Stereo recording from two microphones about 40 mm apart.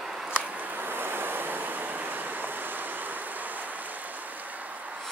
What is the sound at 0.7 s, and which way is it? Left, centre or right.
Waves, right.